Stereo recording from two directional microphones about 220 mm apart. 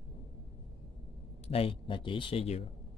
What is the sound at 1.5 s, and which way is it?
Speech, 25° left (ahead or behind).